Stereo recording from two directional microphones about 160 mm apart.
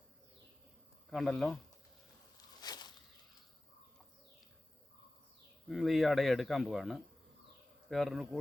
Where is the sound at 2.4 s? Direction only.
25° left (ahead or behind).